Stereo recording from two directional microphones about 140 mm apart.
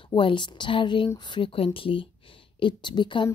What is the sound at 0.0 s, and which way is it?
Speech, 35° left (ahead or behind).